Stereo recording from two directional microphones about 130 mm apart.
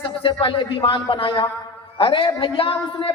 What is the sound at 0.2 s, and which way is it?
Speech, 45° left (ahead or behind).